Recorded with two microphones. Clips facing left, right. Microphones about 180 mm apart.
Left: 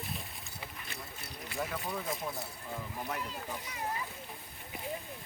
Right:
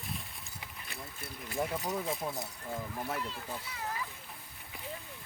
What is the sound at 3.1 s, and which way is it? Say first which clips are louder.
Speech: right 1 dB; 15° left (ahead or behind).